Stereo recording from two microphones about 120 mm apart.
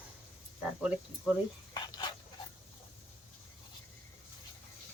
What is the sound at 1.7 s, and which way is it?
Dog, 35° left (ahead or behind).